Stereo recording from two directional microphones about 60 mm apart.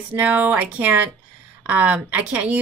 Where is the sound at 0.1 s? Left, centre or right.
Right.